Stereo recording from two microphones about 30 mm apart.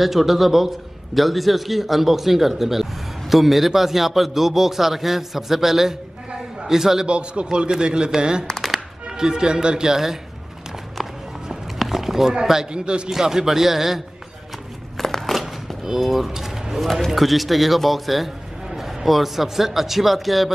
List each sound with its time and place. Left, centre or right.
0.0 s a man's voice: centre
7.1 s a man's voice: right
8.5 s music: centre
8.7 s speech: right
11.8 s a sound: centre
12.7 s a man's voice: right
13.1 s a man's voice: centre
15.0 s a sound: centre
15.8 s a man's voice: centre